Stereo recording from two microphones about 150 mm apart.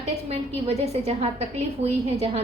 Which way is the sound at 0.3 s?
45° right (ahead or behind).